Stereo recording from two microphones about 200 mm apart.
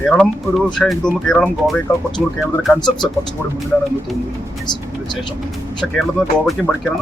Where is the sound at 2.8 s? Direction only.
20° left (ahead or behind).